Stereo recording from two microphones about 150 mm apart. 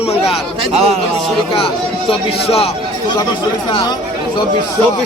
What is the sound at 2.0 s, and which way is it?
Speech, 40° left (ahead or behind).